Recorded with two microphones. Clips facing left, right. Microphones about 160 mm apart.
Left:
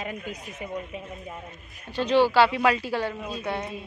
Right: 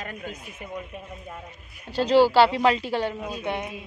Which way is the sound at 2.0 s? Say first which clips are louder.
Right 2 dB; 35° right (ahead or behind).